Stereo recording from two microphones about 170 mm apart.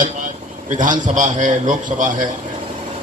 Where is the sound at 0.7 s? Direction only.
50° right (ahead or behind).